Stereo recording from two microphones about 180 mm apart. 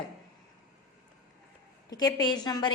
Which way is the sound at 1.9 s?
20° left (ahead or behind).